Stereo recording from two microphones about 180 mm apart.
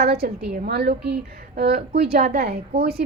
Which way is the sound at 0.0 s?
60° right (ahead or behind).